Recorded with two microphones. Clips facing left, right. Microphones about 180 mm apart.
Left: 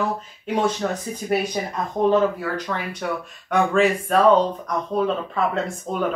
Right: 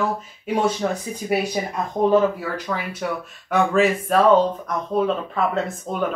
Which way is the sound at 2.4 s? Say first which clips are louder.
Even; 5° right (ahead or behind).